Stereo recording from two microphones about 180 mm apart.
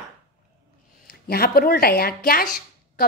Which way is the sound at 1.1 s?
55° left (ahead or behind).